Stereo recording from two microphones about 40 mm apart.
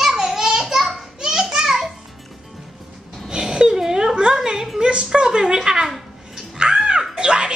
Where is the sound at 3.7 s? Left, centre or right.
Centre.